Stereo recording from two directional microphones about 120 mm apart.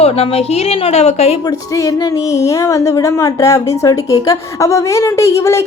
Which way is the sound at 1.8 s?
30° left (ahead or behind).